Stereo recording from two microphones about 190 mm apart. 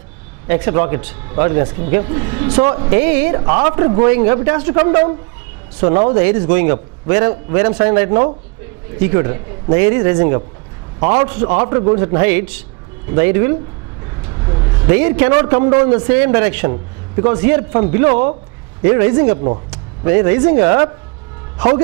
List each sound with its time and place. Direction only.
0.5 s a man's voice: 15° right (ahead or behind)